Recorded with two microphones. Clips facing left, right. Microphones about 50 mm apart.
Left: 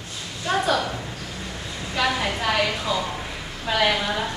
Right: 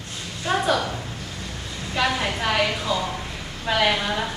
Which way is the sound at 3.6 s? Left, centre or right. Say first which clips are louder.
Even; centre.